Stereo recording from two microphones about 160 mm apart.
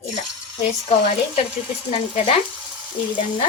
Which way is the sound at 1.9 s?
40° left (ahead or behind).